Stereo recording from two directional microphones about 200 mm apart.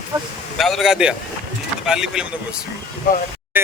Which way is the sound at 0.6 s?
Centre (ahead or behind).